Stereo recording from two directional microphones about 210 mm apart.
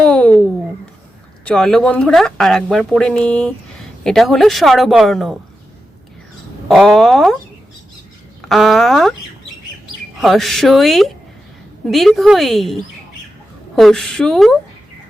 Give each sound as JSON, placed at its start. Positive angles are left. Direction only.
{"t": 0.0, "sound": "a sound", "side_deg": 5}
{"t": 1.5, "sound": "speech", "side_deg": 5}
{"t": 6.7, "sound": "speech", "side_deg": 0}
{"t": 8.4, "sound": "speech", "side_deg": 0}
{"t": 10.2, "sound": "speech", "side_deg": 0}